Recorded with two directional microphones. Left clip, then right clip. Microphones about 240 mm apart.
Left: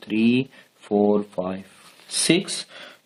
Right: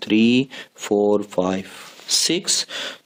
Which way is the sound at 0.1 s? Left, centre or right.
Right.